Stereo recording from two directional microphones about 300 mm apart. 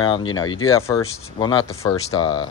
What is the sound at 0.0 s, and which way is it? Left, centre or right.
Speech, centre.